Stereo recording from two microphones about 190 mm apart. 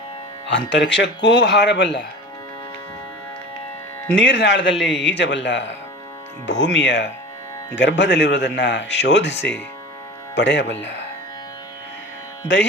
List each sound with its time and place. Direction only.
0.4 s speech: 70° left (ahead or behind)
4.1 s speech: 70° left (ahead or behind)